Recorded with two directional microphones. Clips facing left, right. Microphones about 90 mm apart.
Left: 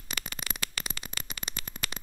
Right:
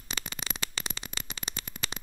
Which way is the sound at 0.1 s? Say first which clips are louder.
Even; 25° right (ahead or behind).